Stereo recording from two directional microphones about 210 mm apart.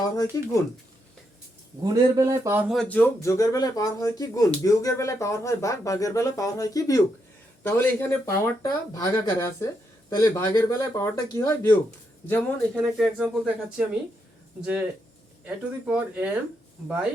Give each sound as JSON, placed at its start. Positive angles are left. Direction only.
{"t": 0.3, "sound": "speech", "side_deg": 15}
{"t": 1.8, "sound": "speech", "side_deg": -15}
{"t": 2.7, "sound": "speech", "side_deg": 5}
{"t": 12.3, "sound": "speech", "side_deg": 0}